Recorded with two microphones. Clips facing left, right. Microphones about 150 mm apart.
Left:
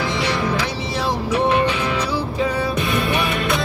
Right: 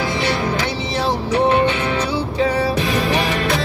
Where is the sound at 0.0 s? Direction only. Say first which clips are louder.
Right 1 dB; 30° right (ahead or behind).